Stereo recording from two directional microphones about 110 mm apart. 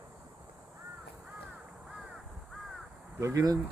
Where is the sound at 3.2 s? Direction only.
30° right (ahead or behind).